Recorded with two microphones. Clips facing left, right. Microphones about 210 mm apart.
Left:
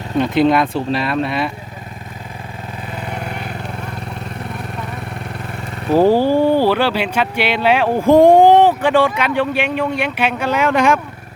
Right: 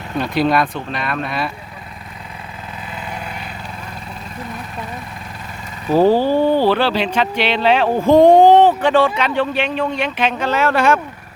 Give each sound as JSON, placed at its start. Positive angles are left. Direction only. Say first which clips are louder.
{"t": 0.2, "sound": "speech", "louder": "left 3 dB", "side_deg": 20}
{"t": 5.9, "sound": "speech", "louder": "left 1 dB", "side_deg": 10}